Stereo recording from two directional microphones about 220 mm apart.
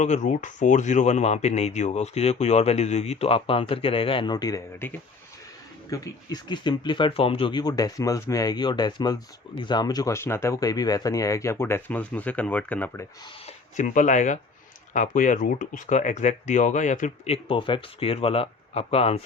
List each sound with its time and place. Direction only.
0.0 s speech: 35° left (ahead or behind); by 13.1 s 10° left (ahead or behind)
13.7 s speech: 35° left (ahead or behind)